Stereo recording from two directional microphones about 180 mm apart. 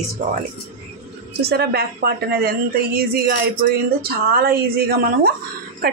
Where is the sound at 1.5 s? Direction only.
60° right (ahead or behind).